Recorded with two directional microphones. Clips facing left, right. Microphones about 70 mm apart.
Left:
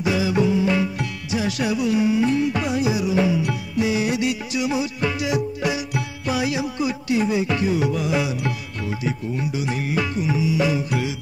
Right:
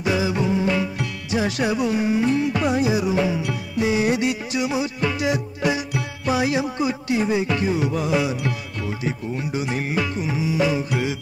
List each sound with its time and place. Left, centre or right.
0.1 s music: right
9.5 s music: right